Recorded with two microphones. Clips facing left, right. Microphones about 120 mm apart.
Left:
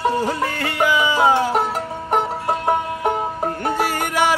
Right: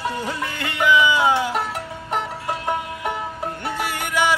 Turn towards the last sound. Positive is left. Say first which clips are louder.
# left 3 dB
turn(degrees=45)  # may be behind; listen again after turning